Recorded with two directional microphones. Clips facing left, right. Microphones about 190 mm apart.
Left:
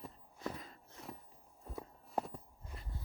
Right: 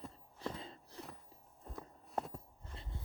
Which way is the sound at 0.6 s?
25° right (ahead or behind).